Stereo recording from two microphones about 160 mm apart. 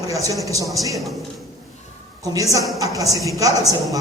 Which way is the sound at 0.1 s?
20° right (ahead or behind).